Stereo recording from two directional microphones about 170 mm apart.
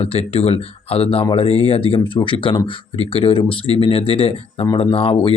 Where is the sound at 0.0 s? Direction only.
35° left (ahead or behind).